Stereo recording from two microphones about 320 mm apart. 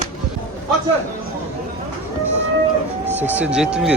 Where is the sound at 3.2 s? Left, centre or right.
Centre.